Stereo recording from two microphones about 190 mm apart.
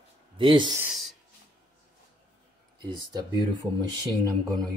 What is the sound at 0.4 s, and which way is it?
Speech, 25° right (ahead or behind).